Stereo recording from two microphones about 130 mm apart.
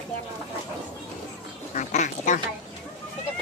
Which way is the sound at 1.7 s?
70° left (ahead or behind).